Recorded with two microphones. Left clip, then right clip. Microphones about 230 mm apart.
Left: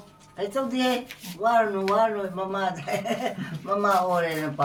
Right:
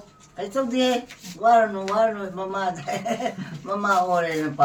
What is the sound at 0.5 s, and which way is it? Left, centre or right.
Speech, centre.